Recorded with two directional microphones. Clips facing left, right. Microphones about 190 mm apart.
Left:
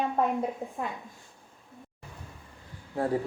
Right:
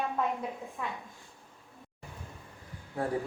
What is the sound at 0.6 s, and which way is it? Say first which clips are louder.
Speech: left 6 dB; 40° left (ahead or behind).